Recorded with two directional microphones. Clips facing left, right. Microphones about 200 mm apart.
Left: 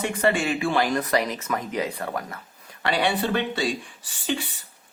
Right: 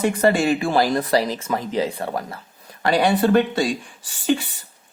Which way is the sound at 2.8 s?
40° right (ahead or behind).